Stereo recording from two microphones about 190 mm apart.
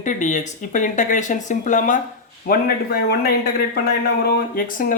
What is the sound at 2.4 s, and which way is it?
Speech, 55° left (ahead or behind).